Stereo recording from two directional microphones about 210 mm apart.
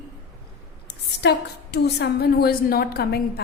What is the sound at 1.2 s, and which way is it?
A woman's voice, 50° left (ahead or behind).